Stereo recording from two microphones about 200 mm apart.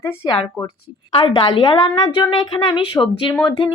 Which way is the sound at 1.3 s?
25° left (ahead or behind).